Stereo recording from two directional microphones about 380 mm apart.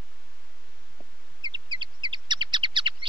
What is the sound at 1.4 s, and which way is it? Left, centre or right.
Bird, centre.